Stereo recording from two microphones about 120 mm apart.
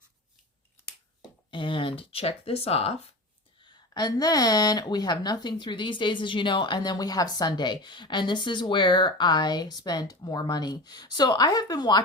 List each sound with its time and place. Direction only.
1.5 s speech: 45° left (ahead or behind)
3.6 s a woman's voice: 40° left (ahead or behind)